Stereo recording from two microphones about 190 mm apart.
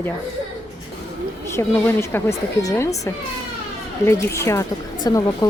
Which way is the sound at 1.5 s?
15° left (ahead or behind).